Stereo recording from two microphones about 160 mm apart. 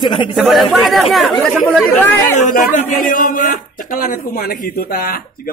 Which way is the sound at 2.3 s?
55° left (ahead or behind).